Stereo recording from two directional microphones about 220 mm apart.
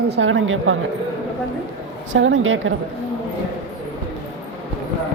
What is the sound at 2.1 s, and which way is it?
Speech, 60° right (ahead or behind).